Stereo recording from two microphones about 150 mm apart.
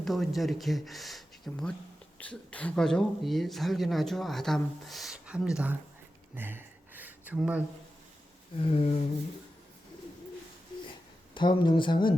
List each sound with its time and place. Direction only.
0.0 s speech: centre (ahead or behind)
6.3 s a sound: 15° right (ahead or behind)
8.6 s speech: 40° left (ahead or behind)
11.3 s speech: 30° left (ahead or behind)